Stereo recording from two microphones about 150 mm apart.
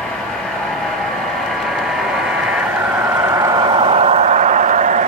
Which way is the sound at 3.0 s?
20° right (ahead or behind).